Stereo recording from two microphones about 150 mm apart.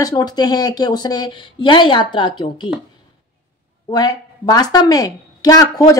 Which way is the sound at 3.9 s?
25° left (ahead or behind).